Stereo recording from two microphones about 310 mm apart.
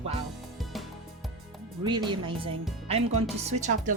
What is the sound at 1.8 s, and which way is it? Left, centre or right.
Speech, centre.